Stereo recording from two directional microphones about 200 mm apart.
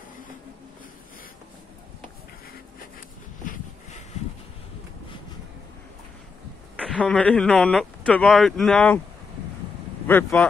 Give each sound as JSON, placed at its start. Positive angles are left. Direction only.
{"t": 3.4, "sound": "a sound", "side_deg": 40}
{"t": 6.8, "sound": "speech", "side_deg": 5}
{"t": 10.0, "sound": "speech", "side_deg": 10}